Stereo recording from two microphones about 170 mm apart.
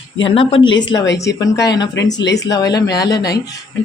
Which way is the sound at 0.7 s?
90° left.